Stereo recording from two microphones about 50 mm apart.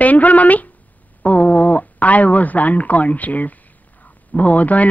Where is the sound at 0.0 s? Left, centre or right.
Left.